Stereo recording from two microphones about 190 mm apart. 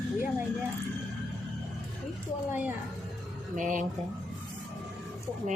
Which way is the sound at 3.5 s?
45° right (ahead or behind).